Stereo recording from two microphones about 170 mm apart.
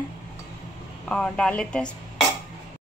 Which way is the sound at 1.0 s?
5° left (ahead or behind).